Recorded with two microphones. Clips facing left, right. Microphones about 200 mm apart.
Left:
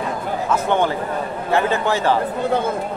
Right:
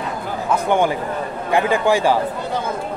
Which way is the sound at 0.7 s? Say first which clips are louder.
Right 3 dB; 15° right (ahead or behind).